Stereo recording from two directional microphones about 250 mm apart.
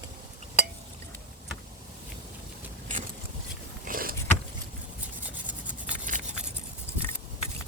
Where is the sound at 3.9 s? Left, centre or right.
Right.